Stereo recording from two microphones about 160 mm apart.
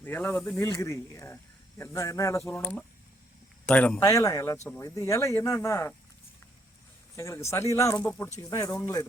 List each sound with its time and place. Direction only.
0.0 s speech: 10° left (ahead or behind)
2.5 s speech: 10° left (ahead or behind)
4.0 s speech: 20° left (ahead or behind)
7.2 s speech: 20° left (ahead or behind)